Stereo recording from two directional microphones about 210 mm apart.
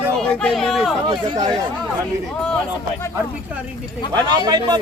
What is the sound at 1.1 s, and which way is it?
Speech, 20° right (ahead or behind).